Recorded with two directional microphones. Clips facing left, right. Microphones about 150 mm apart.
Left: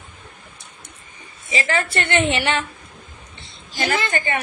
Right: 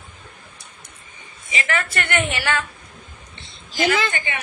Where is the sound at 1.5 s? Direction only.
30° left (ahead or behind).